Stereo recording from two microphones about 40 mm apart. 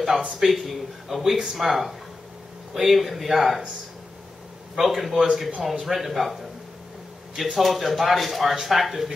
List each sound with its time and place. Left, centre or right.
0.4 s speech: centre
4.7 s speech: centre
7.5 s speech: centre